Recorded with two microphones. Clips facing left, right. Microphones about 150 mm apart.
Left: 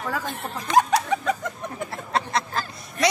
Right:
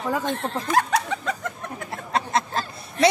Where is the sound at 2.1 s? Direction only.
25° right (ahead or behind).